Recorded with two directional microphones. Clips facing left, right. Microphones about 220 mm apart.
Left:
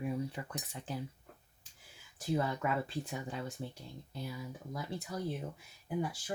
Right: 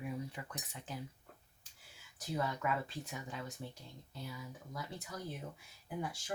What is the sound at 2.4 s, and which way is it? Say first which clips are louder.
Speech: even; 35° left (ahead or behind).